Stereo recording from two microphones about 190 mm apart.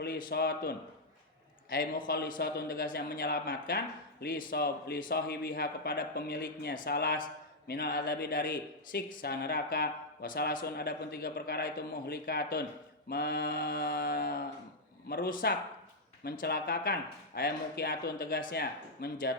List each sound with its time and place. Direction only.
0.0 s a man's voice: 55° left (ahead or behind)
1.7 s a man's voice: 50° left (ahead or behind)